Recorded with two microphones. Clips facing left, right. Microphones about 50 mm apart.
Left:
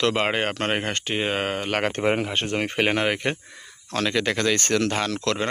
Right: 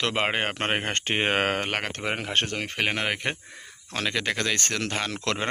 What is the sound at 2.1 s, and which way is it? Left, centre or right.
Speech, centre.